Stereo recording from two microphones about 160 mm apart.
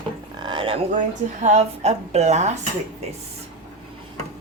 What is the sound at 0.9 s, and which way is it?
Speech, 50° right (ahead or behind).